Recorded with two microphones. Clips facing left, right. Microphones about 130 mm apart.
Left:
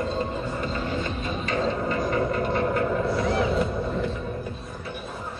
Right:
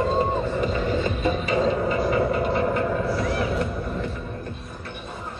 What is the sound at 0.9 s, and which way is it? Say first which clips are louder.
Music: right 5 dB; 10° right (ahead or behind).